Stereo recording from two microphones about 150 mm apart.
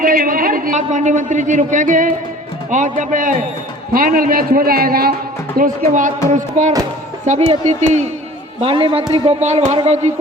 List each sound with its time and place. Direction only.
0.0 s a man's voice: 65° right (ahead or behind)
3.9 s a man's voice: 70° right (ahead or behind); by 5.1 s 90° right
5.5 s a man's voice: 65° right (ahead or behind)
8.6 s a man's voice: 35° right (ahead or behind)